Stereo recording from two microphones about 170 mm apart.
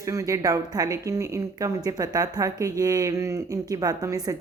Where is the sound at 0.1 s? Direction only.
20° right (ahead or behind).